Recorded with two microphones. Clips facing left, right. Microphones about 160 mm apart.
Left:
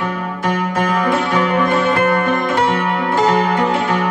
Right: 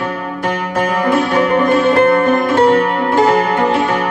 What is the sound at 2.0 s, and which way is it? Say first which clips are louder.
Music: right 5 dB; 35° right (ahead or behind).